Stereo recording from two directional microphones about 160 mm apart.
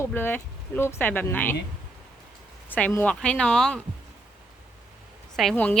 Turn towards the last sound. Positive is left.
turn(degrees=10)  # may be behind; listen again after turning